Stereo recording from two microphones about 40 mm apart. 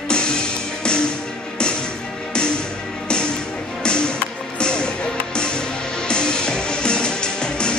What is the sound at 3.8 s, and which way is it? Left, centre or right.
Music, left.